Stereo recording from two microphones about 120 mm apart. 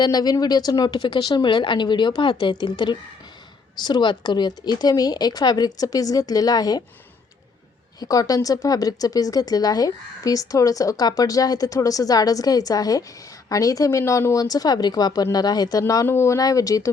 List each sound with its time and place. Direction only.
0.0 s speech: 35° left (ahead or behind)
7.9 s speech: 30° left (ahead or behind)